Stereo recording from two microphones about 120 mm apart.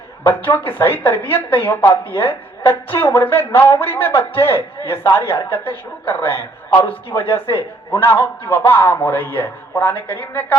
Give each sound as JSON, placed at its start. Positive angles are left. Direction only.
{"t": 0.3, "sound": "speech", "side_deg": 20}